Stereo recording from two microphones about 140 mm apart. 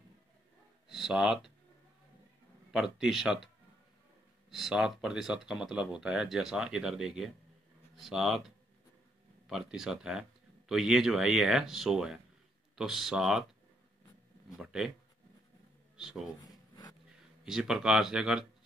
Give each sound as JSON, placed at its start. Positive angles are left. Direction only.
{"t": 0.8, "sound": "speech", "side_deg": -5}
{"t": 2.7, "sound": "speech", "side_deg": -5}
{"t": 4.5, "sound": "speech", "side_deg": 0}
{"t": 9.5, "sound": "speech", "side_deg": 0}
{"t": 14.6, "sound": "speech", "side_deg": -5}
{"t": 16.0, "sound": "speech", "side_deg": -5}
{"t": 16.4, "sound": "a sound", "side_deg": 30}
{"t": 17.5, "sound": "speech", "side_deg": -5}